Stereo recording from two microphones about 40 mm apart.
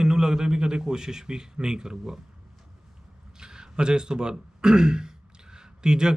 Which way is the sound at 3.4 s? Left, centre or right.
Centre.